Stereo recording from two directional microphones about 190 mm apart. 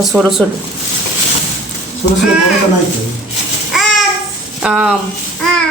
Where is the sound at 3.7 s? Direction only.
Centre (ahead or behind).